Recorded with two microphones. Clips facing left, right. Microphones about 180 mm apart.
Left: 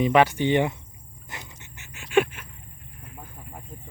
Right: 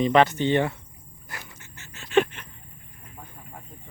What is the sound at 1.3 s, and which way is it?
Pant, 20° left (ahead or behind).